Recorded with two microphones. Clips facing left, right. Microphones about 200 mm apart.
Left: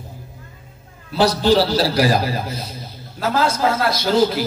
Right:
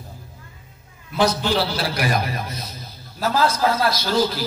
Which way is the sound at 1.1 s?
35° left (ahead or behind).